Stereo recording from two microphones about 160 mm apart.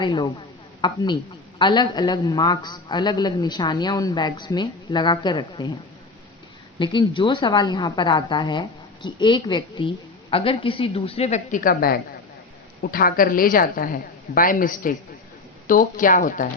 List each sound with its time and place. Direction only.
0.0 s a woman's voice: 30° left (ahead or behind)
6.7 s a woman's voice: 30° left (ahead or behind); by 16.5 s 55° left (ahead or behind)